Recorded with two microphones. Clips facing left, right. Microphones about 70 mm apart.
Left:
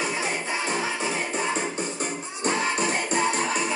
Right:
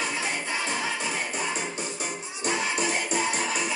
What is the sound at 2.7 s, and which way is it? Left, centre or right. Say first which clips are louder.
Music: left 2 dB; left.